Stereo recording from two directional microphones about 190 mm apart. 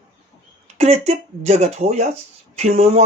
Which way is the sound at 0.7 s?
35° right (ahead or behind).